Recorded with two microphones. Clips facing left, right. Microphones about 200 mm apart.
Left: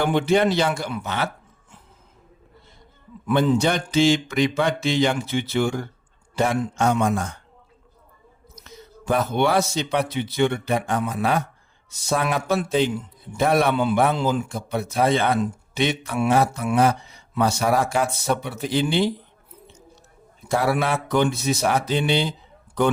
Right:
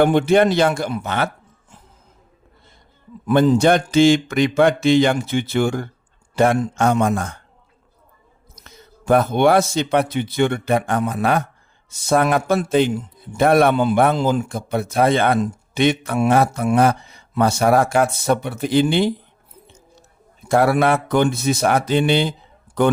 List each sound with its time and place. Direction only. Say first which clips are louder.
0.0 s speech: right 5 dB; 50° right (ahead or behind)
3.2 s a man's voice: right 5 dB; 40° right (ahead or behind); by 7.3 s 55° right (ahead or behind)
8.6 s speech: right 4 dB; 50° right (ahead or behind)
20.5 s speech: right 6 dB; 55° right (ahead or behind)